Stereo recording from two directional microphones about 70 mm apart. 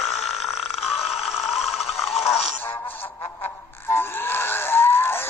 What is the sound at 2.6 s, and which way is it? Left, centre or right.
Music, left.